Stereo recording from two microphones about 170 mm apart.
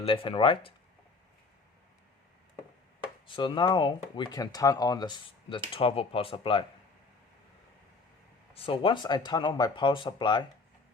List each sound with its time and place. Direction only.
0.0 s speech: 30° left (ahead or behind)
3.2 s speech: 30° left (ahead or behind)
8.5 s speech: 30° left (ahead or behind)